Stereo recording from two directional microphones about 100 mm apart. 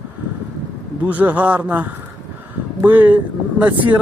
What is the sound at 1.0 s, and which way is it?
A man's voice, 15° right (ahead or behind).